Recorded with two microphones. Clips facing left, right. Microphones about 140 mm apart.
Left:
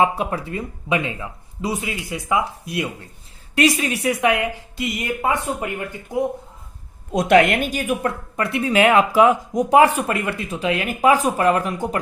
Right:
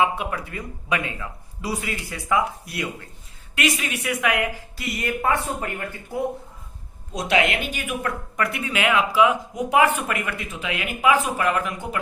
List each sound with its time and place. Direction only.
0.0 s speech: 35° left (ahead or behind)
3.5 s speech: 35° left (ahead or behind); by 6.1 s 15° left (ahead or behind)
7.1 s a woman's voice: 55° left (ahead or behind); by 11.9 s 35° left (ahead or behind)